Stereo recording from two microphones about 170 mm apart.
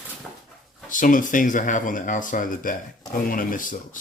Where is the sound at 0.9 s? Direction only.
50° left (ahead or behind).